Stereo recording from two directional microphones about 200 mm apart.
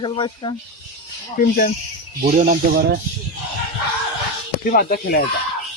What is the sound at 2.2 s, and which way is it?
Speech, 45° right (ahead or behind).